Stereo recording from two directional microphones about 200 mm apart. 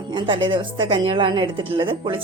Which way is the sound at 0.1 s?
25° right (ahead or behind).